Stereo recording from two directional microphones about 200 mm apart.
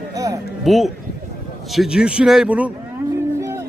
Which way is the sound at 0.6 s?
Centre (ahead or behind).